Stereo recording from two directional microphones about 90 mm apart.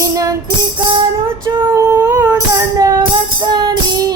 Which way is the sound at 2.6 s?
45° right (ahead or behind).